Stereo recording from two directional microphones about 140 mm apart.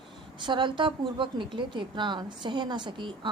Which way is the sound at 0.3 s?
35° right (ahead or behind).